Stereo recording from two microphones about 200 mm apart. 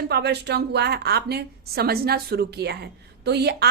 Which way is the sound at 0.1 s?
55° right (ahead or behind).